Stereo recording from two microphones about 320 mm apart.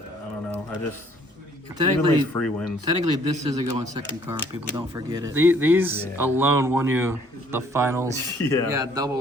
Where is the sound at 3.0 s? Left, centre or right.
Right.